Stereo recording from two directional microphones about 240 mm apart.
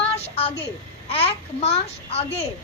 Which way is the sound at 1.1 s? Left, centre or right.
Left.